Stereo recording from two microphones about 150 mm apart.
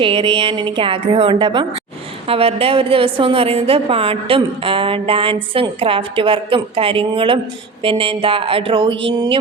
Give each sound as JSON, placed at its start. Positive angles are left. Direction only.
{"t": 0.0, "sound": "a woman's voice", "side_deg": -35}